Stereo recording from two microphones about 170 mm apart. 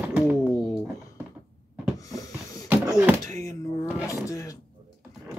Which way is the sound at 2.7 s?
10° right (ahead or behind).